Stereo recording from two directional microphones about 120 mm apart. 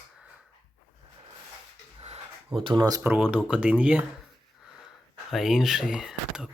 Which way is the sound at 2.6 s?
45° right (ahead or behind).